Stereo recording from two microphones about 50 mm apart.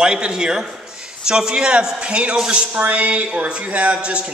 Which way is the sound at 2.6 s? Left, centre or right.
Right.